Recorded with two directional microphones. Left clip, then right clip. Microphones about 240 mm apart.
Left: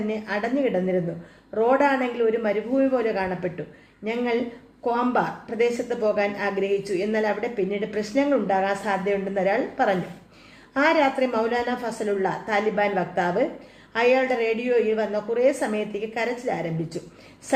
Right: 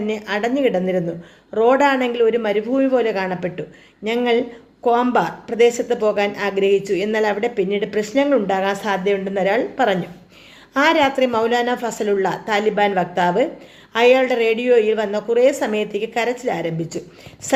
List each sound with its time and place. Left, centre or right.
0.1 s speech: right